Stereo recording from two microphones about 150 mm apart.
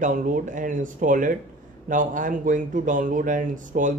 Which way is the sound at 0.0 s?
60° right (ahead or behind).